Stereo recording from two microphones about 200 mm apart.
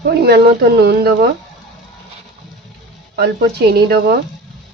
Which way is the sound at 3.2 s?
55° right (ahead or behind).